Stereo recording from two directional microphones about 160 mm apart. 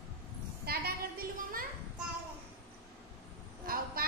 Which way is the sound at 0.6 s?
70° right (ahead or behind).